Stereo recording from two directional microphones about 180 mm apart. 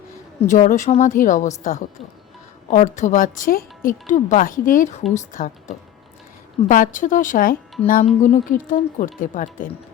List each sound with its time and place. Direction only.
0.4 s a woman's voice: 40° left (ahead or behind)
6.7 s a woman's voice: 50° left (ahead or behind)